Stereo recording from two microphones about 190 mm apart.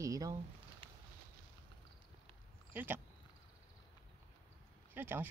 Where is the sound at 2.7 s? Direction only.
10° right (ahead or behind).